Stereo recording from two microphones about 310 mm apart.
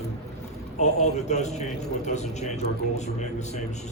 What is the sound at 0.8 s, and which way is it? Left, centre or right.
A man's voice, left.